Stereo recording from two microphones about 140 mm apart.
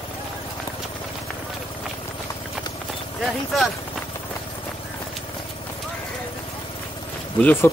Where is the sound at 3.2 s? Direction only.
Centre (ahead or behind).